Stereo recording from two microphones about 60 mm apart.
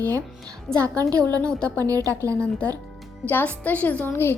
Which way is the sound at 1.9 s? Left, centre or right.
Right.